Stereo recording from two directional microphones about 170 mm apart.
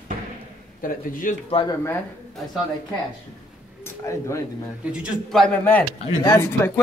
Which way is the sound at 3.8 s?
20° left (ahead or behind).